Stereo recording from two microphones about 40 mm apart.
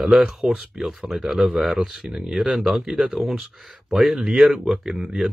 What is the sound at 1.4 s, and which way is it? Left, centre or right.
Speech, centre.